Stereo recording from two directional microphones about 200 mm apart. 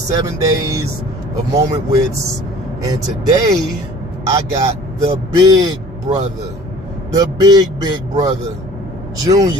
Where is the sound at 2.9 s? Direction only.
20° right (ahead or behind).